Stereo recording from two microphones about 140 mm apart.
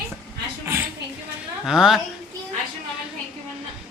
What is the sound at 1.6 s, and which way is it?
Speech, 5° right (ahead or behind).